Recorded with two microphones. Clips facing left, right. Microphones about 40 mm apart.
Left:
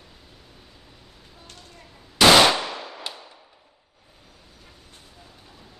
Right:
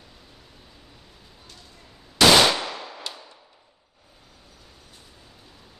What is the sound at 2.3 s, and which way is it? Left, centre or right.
Clang, centre.